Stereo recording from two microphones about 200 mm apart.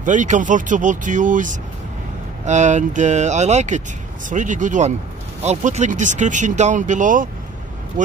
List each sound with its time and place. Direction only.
0.0 s speech: 40° right (ahead or behind)